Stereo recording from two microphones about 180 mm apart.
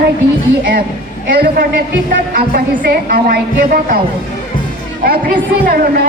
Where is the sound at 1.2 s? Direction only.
65° right (ahead or behind).